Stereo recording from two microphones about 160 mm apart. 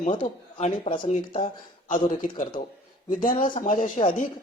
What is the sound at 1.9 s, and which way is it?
A man's voice, 55° left (ahead or behind).